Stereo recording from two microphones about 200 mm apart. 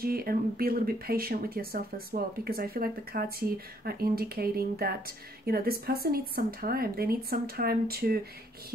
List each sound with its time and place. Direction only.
0.0 s speech: 50° right (ahead or behind)